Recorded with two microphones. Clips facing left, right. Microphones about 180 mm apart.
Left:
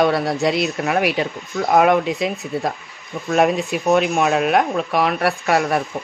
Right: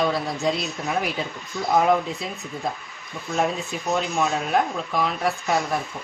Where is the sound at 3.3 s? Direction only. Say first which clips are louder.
Left 8 dB; 75° left (ahead or behind).